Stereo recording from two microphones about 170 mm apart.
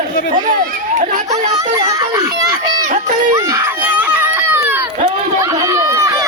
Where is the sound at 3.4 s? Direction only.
15° right (ahead or behind).